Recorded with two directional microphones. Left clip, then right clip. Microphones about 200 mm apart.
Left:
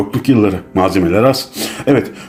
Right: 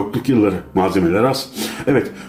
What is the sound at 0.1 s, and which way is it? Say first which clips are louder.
Speech: left 2 dB; 45° left (ahead or behind).